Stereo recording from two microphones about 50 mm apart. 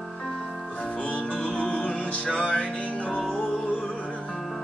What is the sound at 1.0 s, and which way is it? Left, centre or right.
Music, left.